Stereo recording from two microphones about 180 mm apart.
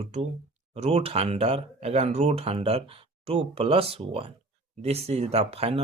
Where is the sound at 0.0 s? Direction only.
40° right (ahead or behind).